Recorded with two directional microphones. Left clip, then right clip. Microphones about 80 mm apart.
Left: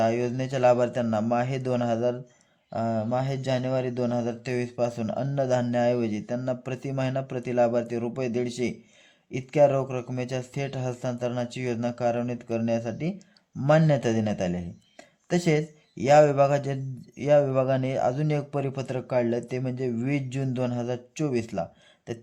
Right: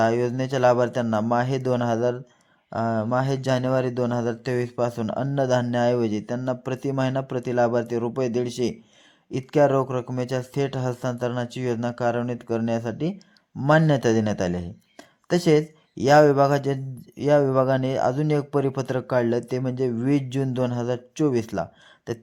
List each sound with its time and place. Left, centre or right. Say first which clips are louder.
0.0 s speech: right 3 dB; right